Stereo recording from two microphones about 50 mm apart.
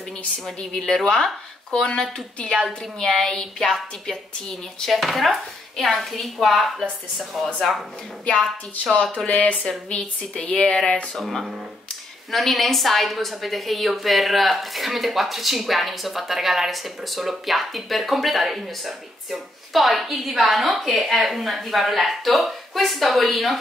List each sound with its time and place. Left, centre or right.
0.6 s a woman's voice: centre
7.3 s speech: centre
9.1 s speech: centre
11.1 s a woman's voice: centre